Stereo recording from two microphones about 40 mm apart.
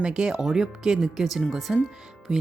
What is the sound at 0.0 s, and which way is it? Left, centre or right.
Speech, centre.